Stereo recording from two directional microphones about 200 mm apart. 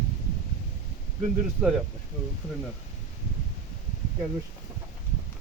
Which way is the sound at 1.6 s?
10° right (ahead or behind).